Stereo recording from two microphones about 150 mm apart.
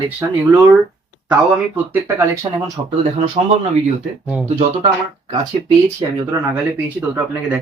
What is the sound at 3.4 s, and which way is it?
Speech, 40° right (ahead or behind).